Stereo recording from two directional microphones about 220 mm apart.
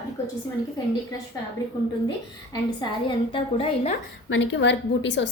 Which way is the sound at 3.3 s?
25° left (ahead or behind).